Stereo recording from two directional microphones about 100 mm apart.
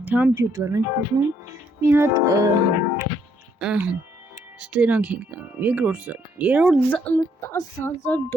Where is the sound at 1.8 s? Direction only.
25° right (ahead or behind).